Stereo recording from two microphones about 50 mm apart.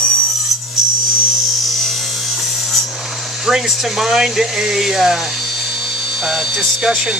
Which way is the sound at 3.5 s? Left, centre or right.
Centre.